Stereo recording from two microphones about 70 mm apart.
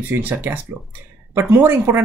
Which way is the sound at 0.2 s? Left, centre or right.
Right.